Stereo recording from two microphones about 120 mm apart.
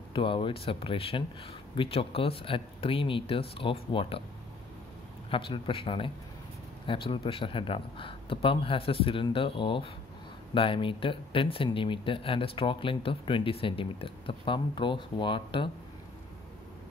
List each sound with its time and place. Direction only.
0.1 s speech: 45° left (ahead or behind)
5.3 s speech: 45° left (ahead or behind)